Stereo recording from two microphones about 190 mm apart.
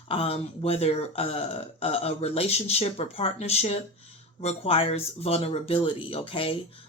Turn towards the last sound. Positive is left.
turn(degrees=30)  # may be behind; listen again after turning